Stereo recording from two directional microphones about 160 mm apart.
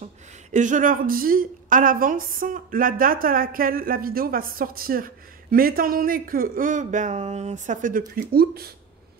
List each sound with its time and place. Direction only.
0.0 s speech: 50° right (ahead or behind)
8.3 s speech: 75° right (ahead or behind)